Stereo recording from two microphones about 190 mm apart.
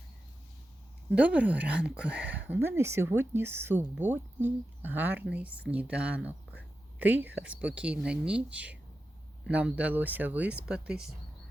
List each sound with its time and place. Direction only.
1.1 s speech: 5° right (ahead or behind)